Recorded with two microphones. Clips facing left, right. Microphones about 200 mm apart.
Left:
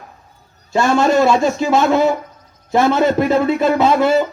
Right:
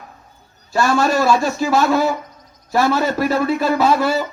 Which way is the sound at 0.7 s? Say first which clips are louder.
Left 3 dB; 20° left (ahead or behind).